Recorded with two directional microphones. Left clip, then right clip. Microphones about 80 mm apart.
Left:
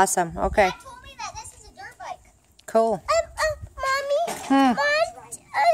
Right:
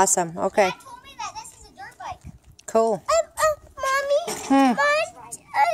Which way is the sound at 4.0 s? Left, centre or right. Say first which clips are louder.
Right 1 dB; centre.